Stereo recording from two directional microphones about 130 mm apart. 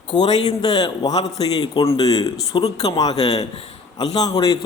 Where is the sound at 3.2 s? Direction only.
55° left (ahead or behind).